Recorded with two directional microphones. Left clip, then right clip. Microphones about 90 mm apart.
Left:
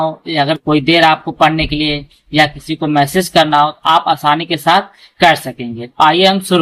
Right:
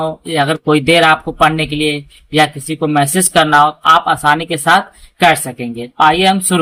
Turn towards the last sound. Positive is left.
turn(degrees=-25)  # may be behind; listen again after turning